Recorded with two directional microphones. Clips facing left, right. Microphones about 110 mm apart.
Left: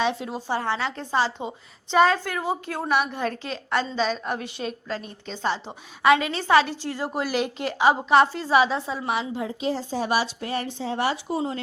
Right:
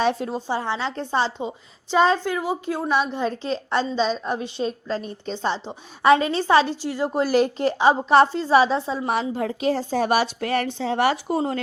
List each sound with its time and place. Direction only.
0.0 s speech: 45° right (ahead or behind)
0.4 s a woman's voice: 15° right (ahead or behind)
0.9 s a woman's voice: 30° right (ahead or behind)
6.8 s a woman's voice: 15° right (ahead or behind)
7.1 s a woman's voice: 35° right (ahead or behind)
9.3 s a woman's voice: 60° right (ahead or behind)